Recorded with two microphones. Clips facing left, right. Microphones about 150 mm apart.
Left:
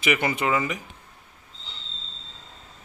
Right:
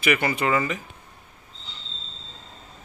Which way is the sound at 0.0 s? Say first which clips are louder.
Right 1 dB; 20° left (ahead or behind).